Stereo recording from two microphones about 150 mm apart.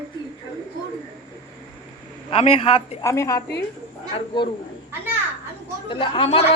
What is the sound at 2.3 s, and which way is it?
Speech, 40° left (ahead or behind).